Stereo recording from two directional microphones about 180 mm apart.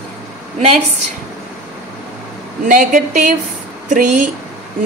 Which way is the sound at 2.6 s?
50° right (ahead or behind).